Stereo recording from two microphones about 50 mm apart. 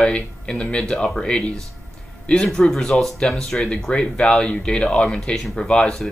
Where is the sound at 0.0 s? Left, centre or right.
Left.